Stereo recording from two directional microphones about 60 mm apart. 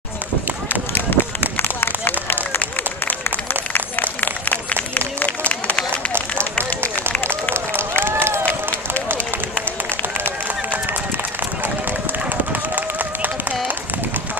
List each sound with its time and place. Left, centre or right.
1.1 s run: left
1.6 s a sound: left
5.5 s run: left
8.0 s run: right
8.5 s run: left